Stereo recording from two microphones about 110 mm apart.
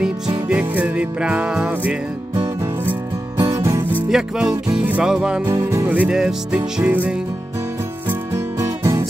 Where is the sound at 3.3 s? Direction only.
35° right (ahead or behind).